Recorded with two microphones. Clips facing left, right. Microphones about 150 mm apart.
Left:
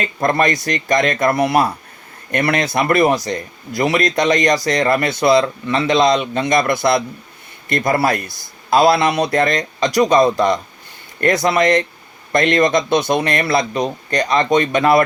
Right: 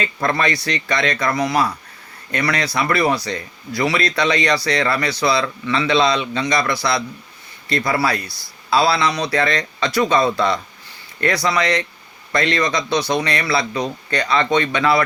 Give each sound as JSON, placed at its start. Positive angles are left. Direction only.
{"t": 0.0, "sound": "a man's voice", "side_deg": 45}